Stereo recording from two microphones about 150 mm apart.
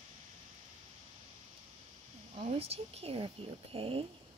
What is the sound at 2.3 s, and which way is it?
A woman's voice, 40° right (ahead or behind).